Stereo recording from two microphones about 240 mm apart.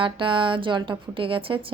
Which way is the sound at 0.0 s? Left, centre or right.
Right.